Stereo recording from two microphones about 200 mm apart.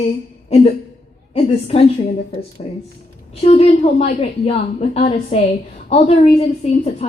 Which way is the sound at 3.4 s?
30° left (ahead or behind).